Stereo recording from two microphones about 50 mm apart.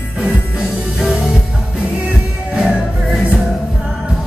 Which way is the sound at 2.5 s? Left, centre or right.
Centre.